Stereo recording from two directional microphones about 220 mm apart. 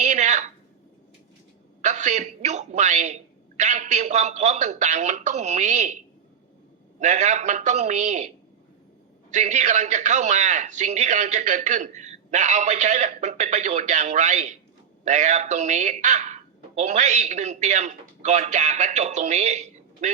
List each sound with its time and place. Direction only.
0.0 s a sound: 30° right (ahead or behind)
1.8 s a woman's voice: 30° right (ahead or behind)
7.0 s a man's voice: 30° right (ahead or behind)
9.3 s a man's voice: 30° right (ahead or behind)